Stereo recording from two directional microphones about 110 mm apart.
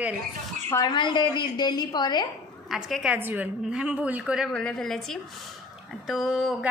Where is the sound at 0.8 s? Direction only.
45° left (ahead or behind).